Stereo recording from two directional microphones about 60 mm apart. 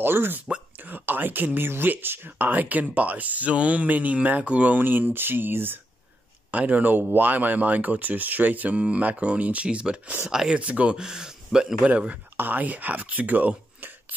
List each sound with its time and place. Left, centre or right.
0.0 s speech: right; by 11.9 s centre
11.9 s speech: right